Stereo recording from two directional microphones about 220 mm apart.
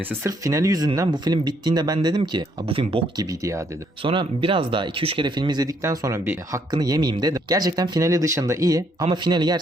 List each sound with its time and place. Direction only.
0.3 s speech: 15° right (ahead or behind)